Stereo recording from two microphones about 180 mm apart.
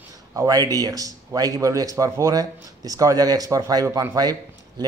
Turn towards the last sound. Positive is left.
turn(degrees=-20)  # may be behind; listen again after turning